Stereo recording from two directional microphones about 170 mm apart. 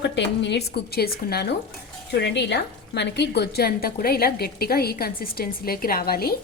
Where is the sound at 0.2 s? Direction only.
85° left; by 1.5 s 70° left (ahead or behind).